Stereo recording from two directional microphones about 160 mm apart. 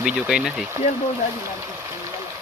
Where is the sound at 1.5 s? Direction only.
15° right (ahead or behind).